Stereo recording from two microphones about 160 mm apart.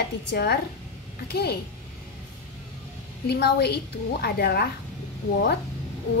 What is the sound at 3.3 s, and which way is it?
A child's voice, 90° left.